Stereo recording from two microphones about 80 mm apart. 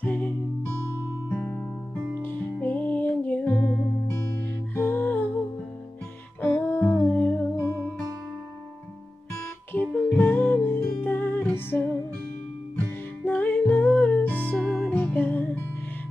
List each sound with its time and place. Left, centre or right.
0.0 s music: centre
1.3 s music: left
4.4 s music: left
6.4 s music: centre
9.7 s music: centre